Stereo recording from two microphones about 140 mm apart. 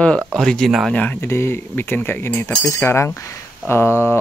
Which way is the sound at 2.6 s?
20° left (ahead or behind).